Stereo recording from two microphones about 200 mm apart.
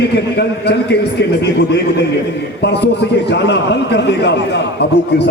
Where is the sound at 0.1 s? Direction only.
55° left (ahead or behind).